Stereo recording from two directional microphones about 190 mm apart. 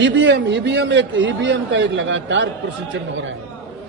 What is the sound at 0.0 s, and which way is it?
A man's voice, 70° right (ahead or behind).